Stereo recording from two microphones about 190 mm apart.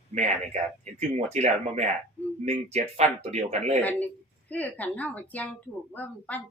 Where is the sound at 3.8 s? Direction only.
10° left (ahead or behind).